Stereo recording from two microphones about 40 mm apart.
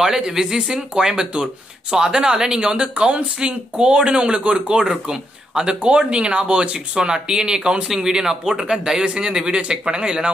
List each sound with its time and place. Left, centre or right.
0.0 s speech: centre
2.7 s speech: right; by 8.7 s centre
8.7 s speech: right